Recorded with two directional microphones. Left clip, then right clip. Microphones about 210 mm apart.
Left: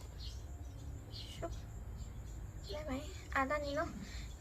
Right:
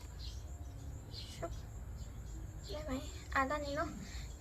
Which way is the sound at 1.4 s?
Centre (ahead or behind).